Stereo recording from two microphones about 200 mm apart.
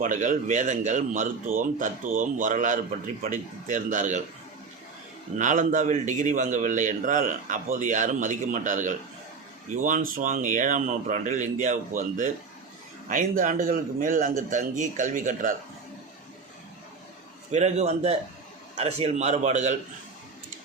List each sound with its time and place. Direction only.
0.0 s a man's voice: 40° right (ahead or behind)
5.4 s a man's voice: 40° right (ahead or behind)
17.5 s a man's voice: 35° right (ahead or behind)